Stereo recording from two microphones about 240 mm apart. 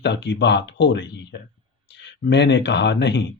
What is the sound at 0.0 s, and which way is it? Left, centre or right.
Speech, left.